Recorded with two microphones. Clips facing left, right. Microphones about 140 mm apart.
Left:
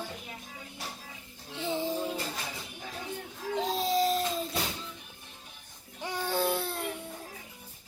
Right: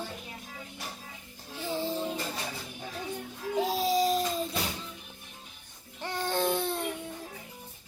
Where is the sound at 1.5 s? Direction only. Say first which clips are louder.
Left 1 dB; 20° left (ahead or behind).